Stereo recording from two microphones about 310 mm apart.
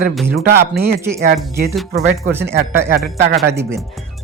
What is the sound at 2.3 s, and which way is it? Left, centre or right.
Speech, centre.